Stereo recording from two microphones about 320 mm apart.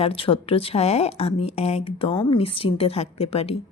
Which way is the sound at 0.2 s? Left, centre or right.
Centre.